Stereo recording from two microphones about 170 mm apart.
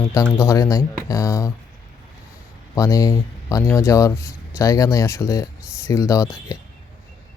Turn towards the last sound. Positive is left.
turn(degrees=20)  # may be behind; listen again after turning